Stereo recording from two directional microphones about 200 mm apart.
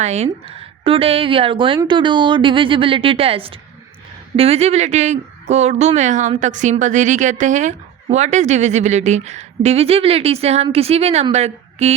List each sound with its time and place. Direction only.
0.0 s a woman's voice: 35° right (ahead or behind)